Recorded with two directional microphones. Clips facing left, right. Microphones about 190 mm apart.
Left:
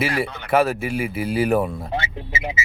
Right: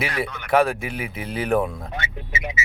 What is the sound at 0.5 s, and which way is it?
Speech, 5° left (ahead or behind).